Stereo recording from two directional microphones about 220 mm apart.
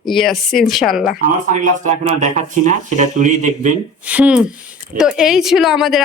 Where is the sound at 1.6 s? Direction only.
35° right (ahead or behind).